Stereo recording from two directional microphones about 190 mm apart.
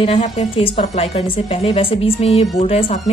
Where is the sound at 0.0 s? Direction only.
35° left (ahead or behind).